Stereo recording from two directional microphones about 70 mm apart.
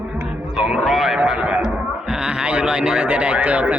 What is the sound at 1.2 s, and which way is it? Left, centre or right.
Speech, centre.